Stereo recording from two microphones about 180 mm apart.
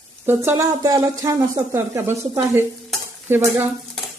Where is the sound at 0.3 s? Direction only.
15° right (ahead or behind).